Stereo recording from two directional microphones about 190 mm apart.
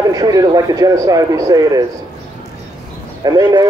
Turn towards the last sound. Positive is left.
turn(degrees=-20)  # may be behind; listen again after turning